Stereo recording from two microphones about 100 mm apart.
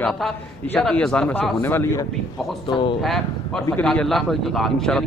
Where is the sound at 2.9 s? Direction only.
Centre (ahead or behind).